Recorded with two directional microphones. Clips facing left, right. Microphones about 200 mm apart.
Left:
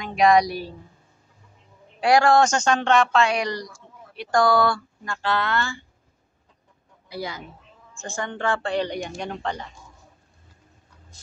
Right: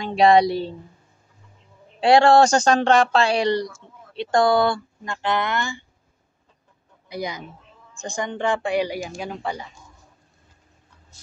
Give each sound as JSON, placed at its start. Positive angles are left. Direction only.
{"t": 0.0, "sound": "speech", "side_deg": -30}
{"t": 2.0, "sound": "speech", "side_deg": -25}
{"t": 7.1, "sound": "speech", "side_deg": -20}